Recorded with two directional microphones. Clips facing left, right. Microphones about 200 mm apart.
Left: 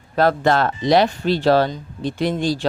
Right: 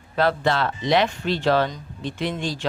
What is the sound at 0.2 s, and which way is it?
Speech, 45° left (ahead or behind).